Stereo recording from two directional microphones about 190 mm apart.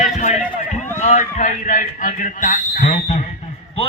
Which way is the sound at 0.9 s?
40° left (ahead or behind).